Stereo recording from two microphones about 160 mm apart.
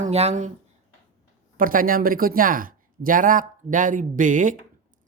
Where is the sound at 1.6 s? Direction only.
60° right (ahead or behind).